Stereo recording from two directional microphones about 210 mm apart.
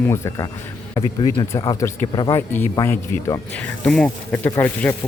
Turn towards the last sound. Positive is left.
turn(degrees=10)  # may be behind; listen again after turning